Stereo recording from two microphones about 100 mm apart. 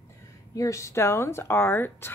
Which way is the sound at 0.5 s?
30° left (ahead or behind).